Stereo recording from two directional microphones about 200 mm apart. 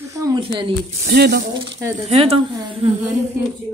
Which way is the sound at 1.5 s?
25° right (ahead or behind).